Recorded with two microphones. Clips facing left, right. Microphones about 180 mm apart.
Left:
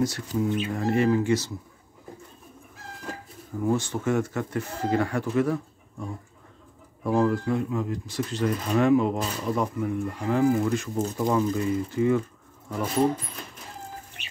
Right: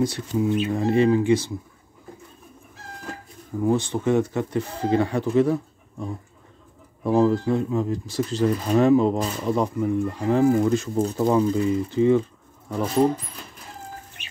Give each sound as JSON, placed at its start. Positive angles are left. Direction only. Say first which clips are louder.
{"t": 0.0, "sound": "speech", "louder": "right 3 dB", "side_deg": -25}
{"t": 3.6, "sound": "speech", "louder": "right 4 dB", "side_deg": -25}